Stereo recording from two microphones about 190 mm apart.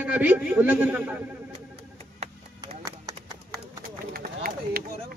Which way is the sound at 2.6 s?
20° right (ahead or behind).